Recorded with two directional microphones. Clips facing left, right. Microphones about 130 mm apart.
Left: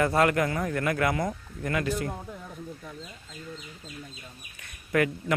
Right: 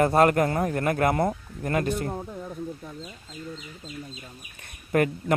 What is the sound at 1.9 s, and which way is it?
Speech, 25° right (ahead or behind).